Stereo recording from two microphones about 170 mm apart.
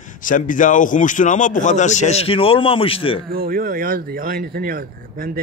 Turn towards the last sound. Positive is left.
turn(degrees=-60)  # may be behind; listen again after turning